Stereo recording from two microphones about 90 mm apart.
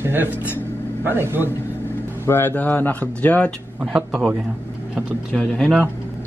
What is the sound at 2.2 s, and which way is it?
Speech, 25° left (ahead or behind).